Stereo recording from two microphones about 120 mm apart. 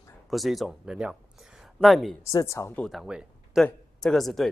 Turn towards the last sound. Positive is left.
turn(degrees=0)  # may be behind; listen again after turning